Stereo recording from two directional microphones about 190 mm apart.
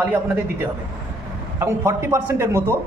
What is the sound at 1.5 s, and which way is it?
Speech, 15° right (ahead or behind).